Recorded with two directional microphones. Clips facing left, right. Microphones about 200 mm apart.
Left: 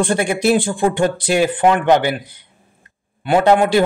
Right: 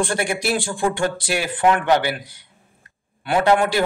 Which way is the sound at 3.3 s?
20° left (ahead or behind).